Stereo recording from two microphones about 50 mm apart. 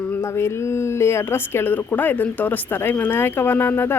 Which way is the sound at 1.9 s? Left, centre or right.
Left.